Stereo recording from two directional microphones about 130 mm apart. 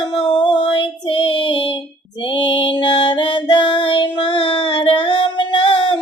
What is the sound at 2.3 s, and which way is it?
Music, 40° left (ahead or behind).